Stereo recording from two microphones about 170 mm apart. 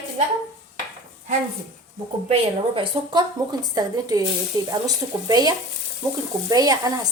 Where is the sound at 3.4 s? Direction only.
20° right (ahead or behind).